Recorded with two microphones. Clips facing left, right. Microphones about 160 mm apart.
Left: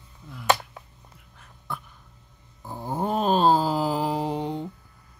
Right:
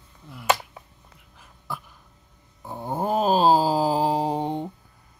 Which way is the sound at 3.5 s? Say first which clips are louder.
Right 2 dB; 30° right (ahead or behind).